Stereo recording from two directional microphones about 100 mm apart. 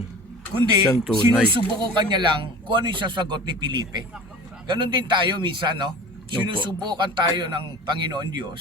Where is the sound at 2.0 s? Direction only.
45° right (ahead or behind).